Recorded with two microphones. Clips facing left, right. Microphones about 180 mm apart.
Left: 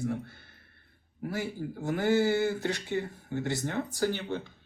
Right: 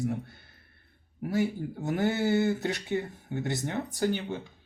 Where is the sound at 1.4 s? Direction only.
20° right (ahead or behind).